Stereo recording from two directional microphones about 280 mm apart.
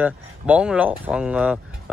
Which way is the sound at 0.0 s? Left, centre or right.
Centre.